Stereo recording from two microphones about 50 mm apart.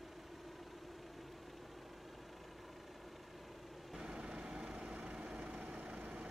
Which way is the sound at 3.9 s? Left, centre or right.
Centre.